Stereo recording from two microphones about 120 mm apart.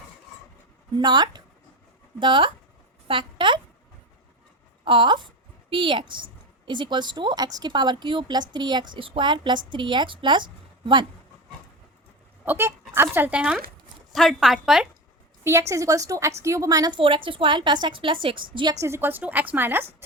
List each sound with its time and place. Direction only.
0.9 s a woman's voice: 35° right (ahead or behind)
4.9 s a woman's voice: 45° right (ahead or behind)
12.5 s a woman's voice: 20° right (ahead or behind)
14.1 s a woman's voice: centre (ahead or behind)
15.4 s a woman's voice: 25° right (ahead or behind)
17.0 s a woman's voice: 45° right (ahead or behind)
18.7 s a woman's voice: 25° right (ahead or behind)